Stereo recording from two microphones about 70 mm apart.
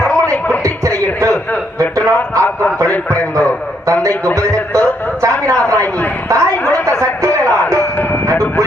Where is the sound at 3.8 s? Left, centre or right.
Right.